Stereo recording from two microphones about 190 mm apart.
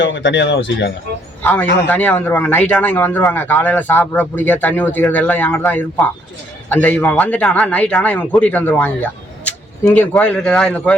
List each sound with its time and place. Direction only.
0.0 s speech: 75° left (ahead or behind)
1.4 s a man's voice: 10° left (ahead or behind)